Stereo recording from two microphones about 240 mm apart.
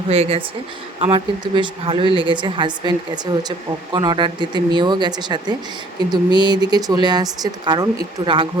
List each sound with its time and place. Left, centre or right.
0.1 s a woman's voice: right
3.9 s a woman's voice: centre